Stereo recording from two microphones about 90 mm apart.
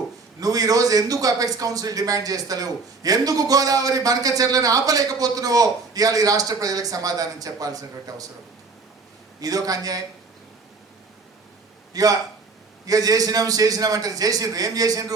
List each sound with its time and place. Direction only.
0.3 s a man's voice: 45° right (ahead or behind)
9.4 s a man's voice: 45° right (ahead or behind)
11.9 s a man's voice: 40° right (ahead or behind)